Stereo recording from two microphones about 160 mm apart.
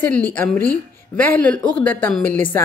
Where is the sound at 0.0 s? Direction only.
10° left (ahead or behind).